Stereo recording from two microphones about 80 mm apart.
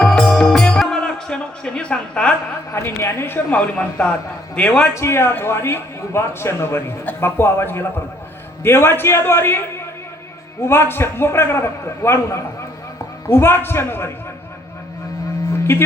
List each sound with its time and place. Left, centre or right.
0.0 s music: centre
2.7 s a man's voice: left; by 4.9 s centre
4.9 s a man's voice: left
15.7 s a man's voice: left